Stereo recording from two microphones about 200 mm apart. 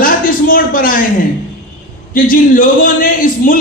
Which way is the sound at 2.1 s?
45° left (ahead or behind).